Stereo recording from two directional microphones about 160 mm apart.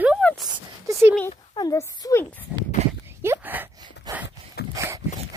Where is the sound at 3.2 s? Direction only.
15° right (ahead or behind).